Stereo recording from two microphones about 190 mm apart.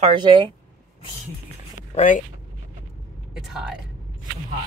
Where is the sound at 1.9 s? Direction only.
40° left (ahead or behind).